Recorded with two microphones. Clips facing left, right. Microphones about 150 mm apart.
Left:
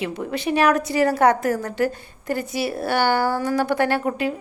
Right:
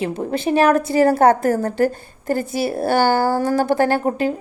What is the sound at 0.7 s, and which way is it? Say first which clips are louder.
A woman's voice: right 5 dB; 50° right (ahead or behind).